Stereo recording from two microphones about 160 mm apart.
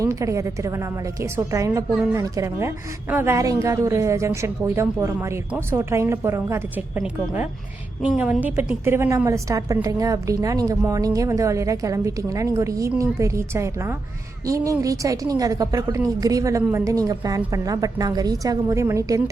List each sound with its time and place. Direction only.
0.0 s a woman's voice: 20° right (ahead or behind)